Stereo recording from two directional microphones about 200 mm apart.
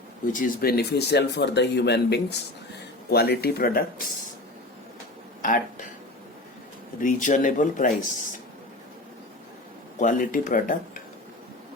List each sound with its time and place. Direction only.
0.3 s speech: 50° left (ahead or behind)
5.4 s a sound: 40° left (ahead or behind)
7.0 s speech: 40° left (ahead or behind)
10.0 s speech: 40° left (ahead or behind)